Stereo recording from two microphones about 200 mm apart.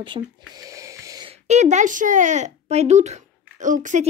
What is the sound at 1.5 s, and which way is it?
Speech, 35° right (ahead or behind).